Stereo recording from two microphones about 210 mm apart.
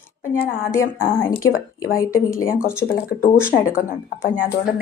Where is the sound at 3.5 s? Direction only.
40° left (ahead or behind).